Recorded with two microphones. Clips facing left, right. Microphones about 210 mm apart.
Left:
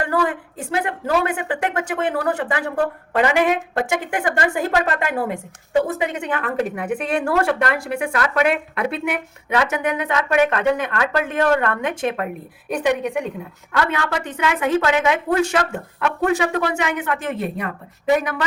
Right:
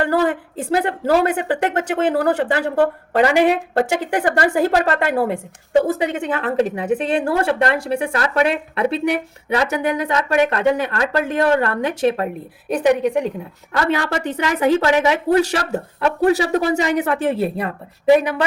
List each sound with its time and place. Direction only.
0.0 s a woman's voice: 30° right (ahead or behind)